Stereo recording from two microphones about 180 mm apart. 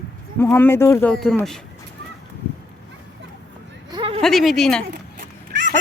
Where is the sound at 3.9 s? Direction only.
30° right (ahead or behind).